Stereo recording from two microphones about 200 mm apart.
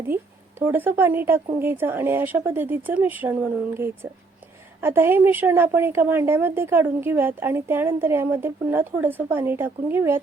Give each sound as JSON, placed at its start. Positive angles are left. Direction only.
{"t": 0.6, "sound": "a woman's voice", "side_deg": -10}